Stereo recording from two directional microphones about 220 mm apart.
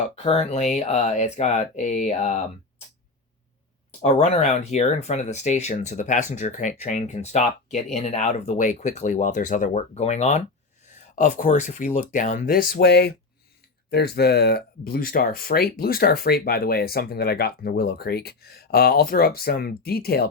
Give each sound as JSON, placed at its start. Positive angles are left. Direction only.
{"t": 0.2, "sound": "speech", "side_deg": 30}
{"t": 4.0, "sound": "speech", "side_deg": 30}